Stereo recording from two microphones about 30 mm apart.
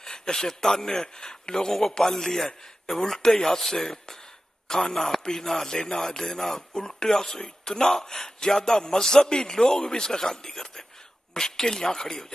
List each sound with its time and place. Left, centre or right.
0.0 s speech: left
1.0 s a man's voice: left
1.7 s speech: centre
2.0 s a man's voice: centre